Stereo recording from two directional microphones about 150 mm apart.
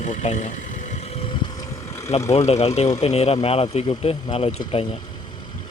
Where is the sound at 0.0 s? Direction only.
50° left (ahead or behind).